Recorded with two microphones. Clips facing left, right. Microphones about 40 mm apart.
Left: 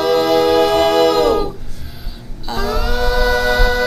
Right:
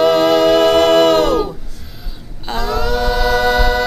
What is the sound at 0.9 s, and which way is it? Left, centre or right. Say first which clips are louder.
A capella: right 2 dB; right.